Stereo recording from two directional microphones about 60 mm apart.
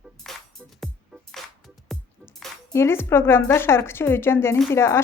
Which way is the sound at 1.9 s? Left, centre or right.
Centre.